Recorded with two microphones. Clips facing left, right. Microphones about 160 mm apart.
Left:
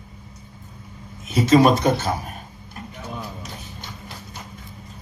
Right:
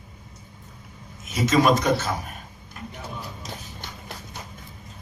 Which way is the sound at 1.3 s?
30° left (ahead or behind).